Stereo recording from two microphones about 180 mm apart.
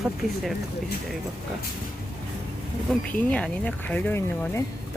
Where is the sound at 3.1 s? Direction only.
5° left (ahead or behind).